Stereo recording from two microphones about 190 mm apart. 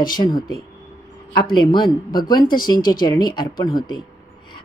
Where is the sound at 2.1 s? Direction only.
20° left (ahead or behind).